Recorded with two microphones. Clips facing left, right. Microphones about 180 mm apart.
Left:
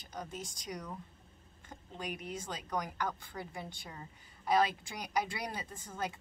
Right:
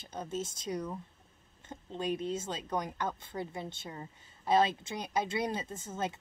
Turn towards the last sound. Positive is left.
turn(degrees=-25)  # may be behind; listen again after turning